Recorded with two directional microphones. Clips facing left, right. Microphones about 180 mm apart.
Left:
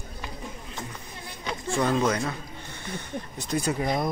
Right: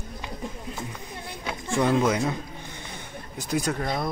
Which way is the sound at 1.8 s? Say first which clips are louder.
Right 2 dB; 10° right (ahead or behind).